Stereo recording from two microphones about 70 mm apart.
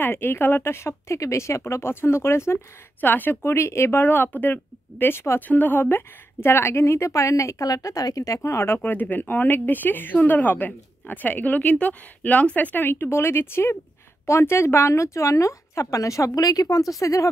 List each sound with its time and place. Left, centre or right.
0.0 s speech: left
3.5 s speech: left
4.0 s a woman's voice: left
8.4 s speech: left
8.7 s a woman's voice: left